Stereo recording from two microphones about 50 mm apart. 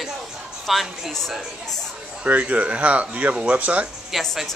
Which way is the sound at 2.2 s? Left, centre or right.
Right.